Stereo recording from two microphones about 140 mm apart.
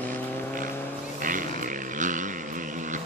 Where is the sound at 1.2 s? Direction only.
75° right (ahead or behind).